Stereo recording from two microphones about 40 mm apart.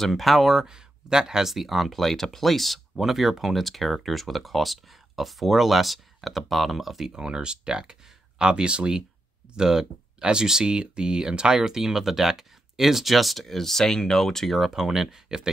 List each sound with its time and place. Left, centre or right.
0.0 s speech: centre
0.6 s speech: centre
7.1 s speech: centre
9.6 s speech: centre
14.5 s speech: centre